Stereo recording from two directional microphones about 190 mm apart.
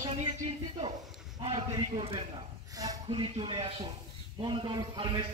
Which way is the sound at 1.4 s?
25° right (ahead or behind).